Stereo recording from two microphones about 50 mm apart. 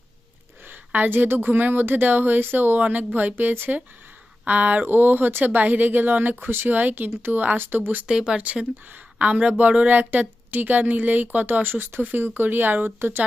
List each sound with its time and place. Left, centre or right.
0.7 s speech: right
8.0 s speech: centre
9.1 s speech: right